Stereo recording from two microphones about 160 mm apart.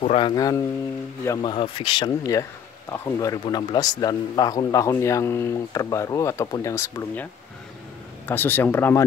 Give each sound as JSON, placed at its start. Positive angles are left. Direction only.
{"t": 0.0, "sound": "speech", "side_deg": 40}
{"t": 0.3, "sound": "speech", "side_deg": 25}
{"t": 1.5, "sound": "speech", "side_deg": 30}
{"t": 8.3, "sound": "speech", "side_deg": 15}